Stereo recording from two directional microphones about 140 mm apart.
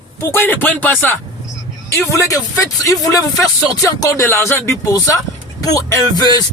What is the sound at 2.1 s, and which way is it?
A man's voice, 25° left (ahead or behind).